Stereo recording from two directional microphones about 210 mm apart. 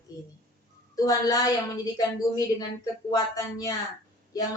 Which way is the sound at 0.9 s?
15° left (ahead or behind).